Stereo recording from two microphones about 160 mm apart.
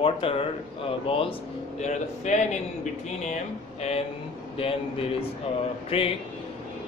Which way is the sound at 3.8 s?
40° left (ahead or behind).